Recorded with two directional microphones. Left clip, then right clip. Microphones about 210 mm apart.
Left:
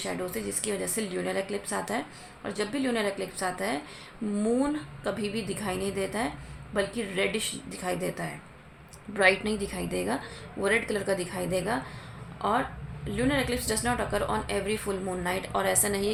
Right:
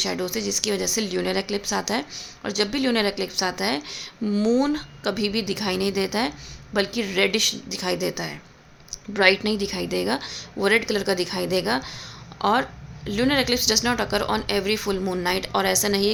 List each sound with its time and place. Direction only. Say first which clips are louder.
0.0 s speech: right 7 dB; 40° right (ahead or behind)